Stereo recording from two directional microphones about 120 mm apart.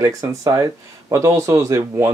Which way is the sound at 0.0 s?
25° right (ahead or behind).